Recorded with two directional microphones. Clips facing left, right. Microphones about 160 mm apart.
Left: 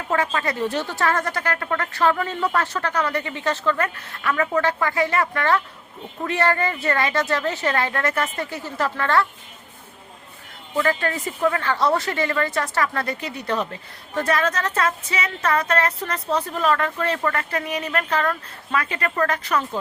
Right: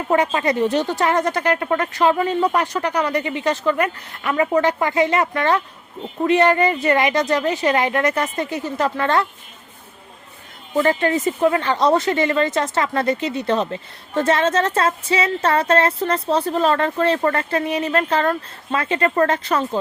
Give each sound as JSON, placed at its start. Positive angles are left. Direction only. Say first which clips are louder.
{"t": 0.3, "sound": "a woman's voice", "louder": "right 5 dB", "side_deg": -20}
{"t": 10.8, "sound": "a woman's voice", "louder": "right 5 dB", "side_deg": -20}